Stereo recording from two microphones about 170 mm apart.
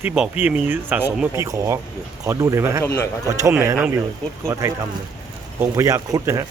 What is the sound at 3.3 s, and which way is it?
Speech, 20° right (ahead or behind).